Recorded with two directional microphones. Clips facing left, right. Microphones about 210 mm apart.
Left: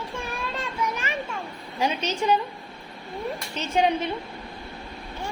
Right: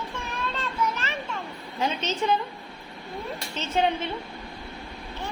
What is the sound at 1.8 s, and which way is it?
Speech, 10° left (ahead or behind).